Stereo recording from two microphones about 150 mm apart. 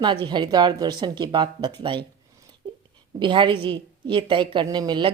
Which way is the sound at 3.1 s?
30° right (ahead or behind).